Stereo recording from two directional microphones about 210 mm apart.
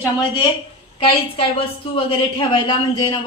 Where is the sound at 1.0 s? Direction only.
25° left (ahead or behind).